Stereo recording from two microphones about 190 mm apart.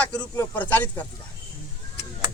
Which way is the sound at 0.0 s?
10° left (ahead or behind).